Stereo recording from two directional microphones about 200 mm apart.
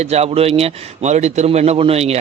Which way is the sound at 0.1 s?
30° right (ahead or behind).